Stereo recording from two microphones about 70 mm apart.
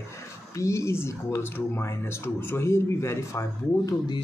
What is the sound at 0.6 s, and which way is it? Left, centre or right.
Speech, left.